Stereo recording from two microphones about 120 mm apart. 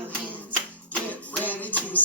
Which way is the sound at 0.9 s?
10° left (ahead or behind).